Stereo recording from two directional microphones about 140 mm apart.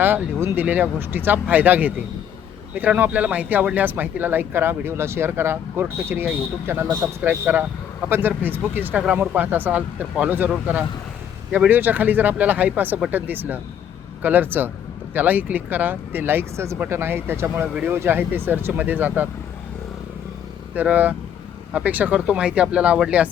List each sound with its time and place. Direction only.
0.0 s speech: 15° right (ahead or behind)
20.7 s speech: 10° right (ahead or behind)